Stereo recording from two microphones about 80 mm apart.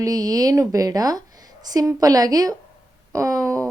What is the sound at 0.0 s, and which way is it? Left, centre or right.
Speech, right.